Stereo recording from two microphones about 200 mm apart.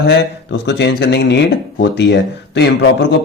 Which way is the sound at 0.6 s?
60° left (ahead or behind).